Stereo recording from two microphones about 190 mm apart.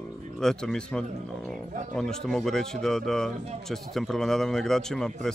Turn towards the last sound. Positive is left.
turn(degrees=0)  # may be behind; listen again after turning